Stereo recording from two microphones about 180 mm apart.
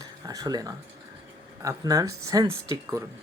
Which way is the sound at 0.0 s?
20° right (ahead or behind).